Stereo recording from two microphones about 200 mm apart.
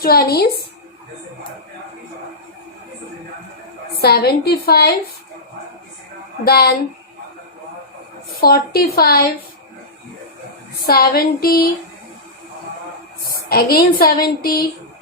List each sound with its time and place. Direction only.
0.0 s speech: 50° left (ahead or behind)
4.0 s speech: 50° left (ahead or behind)
6.4 s speech: 50° left (ahead or behind)
8.4 s speech: 50° left (ahead or behind)
10.8 s speech: 50° left (ahead or behind)
13.5 s speech: 50° left (ahead or behind)